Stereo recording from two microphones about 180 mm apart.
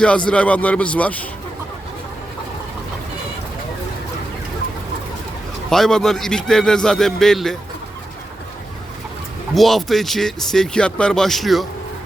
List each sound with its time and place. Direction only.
0.3 s a man's voice: 5° left (ahead or behind)
5.7 s speech: centre (ahead or behind)
9.6 s speech: centre (ahead or behind)